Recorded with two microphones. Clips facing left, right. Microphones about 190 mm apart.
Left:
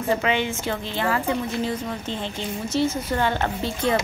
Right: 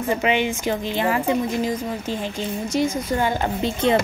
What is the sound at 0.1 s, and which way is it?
Speech, 15° right (ahead or behind).